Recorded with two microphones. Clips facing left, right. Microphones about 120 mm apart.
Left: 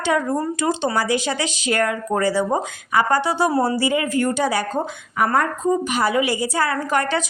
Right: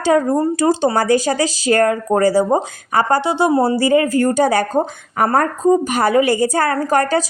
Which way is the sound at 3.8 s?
45° right (ahead or behind).